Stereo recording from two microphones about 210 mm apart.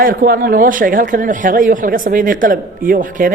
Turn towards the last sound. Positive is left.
turn(degrees=-40)  # may be behind; listen again after turning